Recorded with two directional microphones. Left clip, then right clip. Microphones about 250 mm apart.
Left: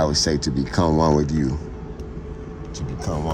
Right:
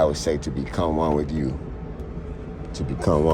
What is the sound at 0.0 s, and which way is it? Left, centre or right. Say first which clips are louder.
Speech: left 1 dB; centre.